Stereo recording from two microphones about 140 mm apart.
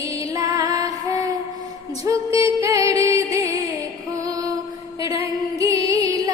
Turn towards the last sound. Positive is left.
turn(degrees=-25)  # may be behind; listen again after turning